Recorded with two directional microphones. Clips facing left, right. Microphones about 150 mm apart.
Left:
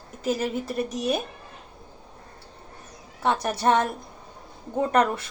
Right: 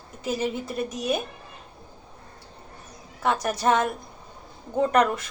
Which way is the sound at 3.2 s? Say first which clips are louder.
Even; 30° left (ahead or behind).